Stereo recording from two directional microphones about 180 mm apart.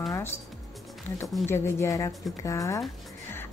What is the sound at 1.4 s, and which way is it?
Speech, 15° left (ahead or behind).